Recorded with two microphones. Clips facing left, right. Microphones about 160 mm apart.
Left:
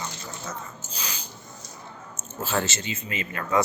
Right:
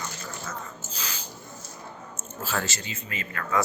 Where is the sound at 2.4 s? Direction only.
25° left (ahead or behind).